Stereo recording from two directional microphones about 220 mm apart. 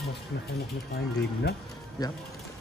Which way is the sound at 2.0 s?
15° left (ahead or behind).